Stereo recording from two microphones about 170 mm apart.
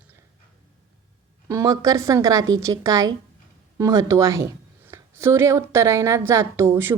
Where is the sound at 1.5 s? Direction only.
20° right (ahead or behind).